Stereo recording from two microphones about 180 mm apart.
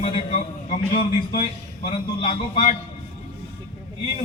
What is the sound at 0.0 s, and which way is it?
Speech, 30° left (ahead or behind).